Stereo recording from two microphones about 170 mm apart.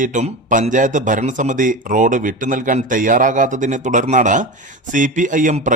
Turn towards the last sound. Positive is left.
turn(degrees=-50)  # may be behind; listen again after turning